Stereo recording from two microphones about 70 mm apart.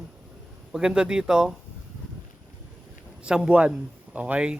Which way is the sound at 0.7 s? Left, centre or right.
Centre.